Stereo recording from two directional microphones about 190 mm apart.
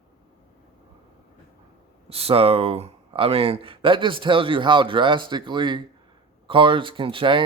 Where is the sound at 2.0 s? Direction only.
30° right (ahead or behind).